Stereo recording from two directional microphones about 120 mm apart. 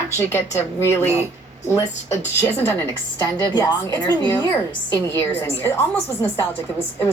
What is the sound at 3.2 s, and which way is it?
Speech, 35° left (ahead or behind).